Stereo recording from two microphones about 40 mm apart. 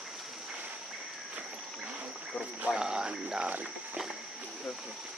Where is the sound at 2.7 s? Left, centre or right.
Centre.